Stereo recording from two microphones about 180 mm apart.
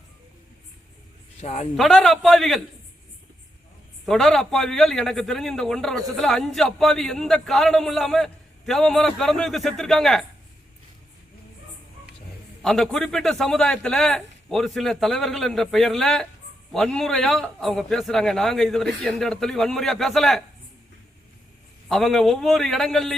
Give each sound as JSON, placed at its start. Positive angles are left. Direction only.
{"t": 1.4, "sound": "a man's voice", "side_deg": 35}
{"t": 1.7, "sound": "a man's voice", "side_deg": 0}
{"t": 4.0, "sound": "a man's voice", "side_deg": 0}
{"t": 12.6, "sound": "a man's voice", "side_deg": 0}
{"t": 21.8, "sound": "a man's voice", "side_deg": 0}